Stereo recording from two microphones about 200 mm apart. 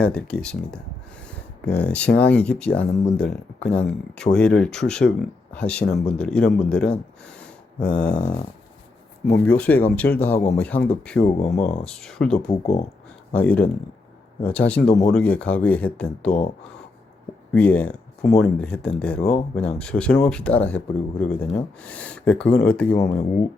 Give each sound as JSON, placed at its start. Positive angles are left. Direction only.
{"t": 0.0, "sound": "speech", "side_deg": 5}
{"t": 9.4, "sound": "speech", "side_deg": 5}
{"t": 11.2, "sound": "speech", "side_deg": 35}
{"t": 11.9, "sound": "speech", "side_deg": 5}
{"t": 12.4, "sound": "speech", "side_deg": 30}
{"t": 13.3, "sound": "speech", "side_deg": 5}
{"t": 17.5, "sound": "speech", "side_deg": 5}